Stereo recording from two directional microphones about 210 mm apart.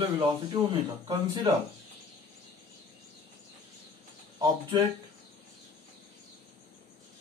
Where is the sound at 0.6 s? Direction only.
20° right (ahead or behind).